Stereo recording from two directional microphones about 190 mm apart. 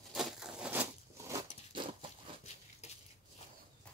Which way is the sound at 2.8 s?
35° left (ahead or behind).